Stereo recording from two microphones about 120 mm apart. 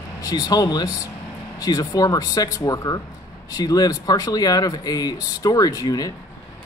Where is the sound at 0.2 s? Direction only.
30° left (ahead or behind).